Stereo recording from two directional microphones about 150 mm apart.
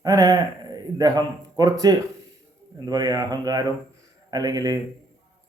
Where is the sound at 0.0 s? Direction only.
25° right (ahead or behind).